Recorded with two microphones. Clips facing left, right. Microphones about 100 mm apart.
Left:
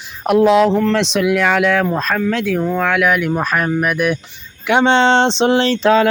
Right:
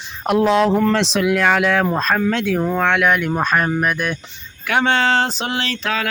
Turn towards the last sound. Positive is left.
turn(degrees=30)  # may be behind; listen again after turning